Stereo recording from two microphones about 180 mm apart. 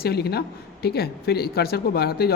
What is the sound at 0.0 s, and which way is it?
Speech, 65° left (ahead or behind).